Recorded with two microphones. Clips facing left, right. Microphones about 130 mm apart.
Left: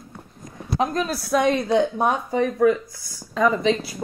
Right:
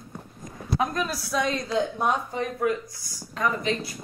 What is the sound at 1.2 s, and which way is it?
A woman's voice, 60° left (ahead or behind).